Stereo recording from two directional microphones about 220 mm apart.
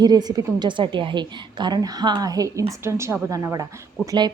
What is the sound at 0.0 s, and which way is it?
A woman's voice, 20° right (ahead or behind).